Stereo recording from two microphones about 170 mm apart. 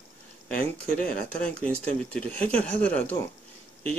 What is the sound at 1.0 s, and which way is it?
Speech, 50° left (ahead or behind).